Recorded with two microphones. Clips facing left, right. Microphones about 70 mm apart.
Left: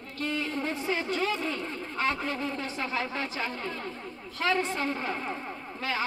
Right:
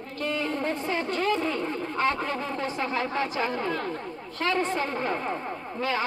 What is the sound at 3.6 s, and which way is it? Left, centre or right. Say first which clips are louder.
Speech: right 6 dB; right.